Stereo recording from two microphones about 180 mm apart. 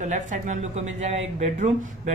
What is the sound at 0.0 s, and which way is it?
A woman's voice, 40° right (ahead or behind).